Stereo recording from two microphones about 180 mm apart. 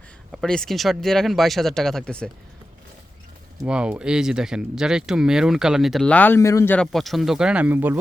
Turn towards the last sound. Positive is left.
turn(degrees=-10)  # may be behind; listen again after turning